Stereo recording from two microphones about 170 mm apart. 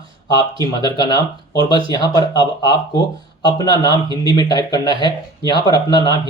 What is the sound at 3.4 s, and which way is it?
Speech, 25° left (ahead or behind).